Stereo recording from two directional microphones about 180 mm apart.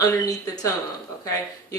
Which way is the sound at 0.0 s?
20° left (ahead or behind).